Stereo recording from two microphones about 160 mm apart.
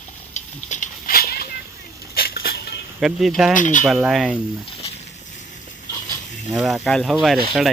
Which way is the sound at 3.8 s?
5° right (ahead or behind).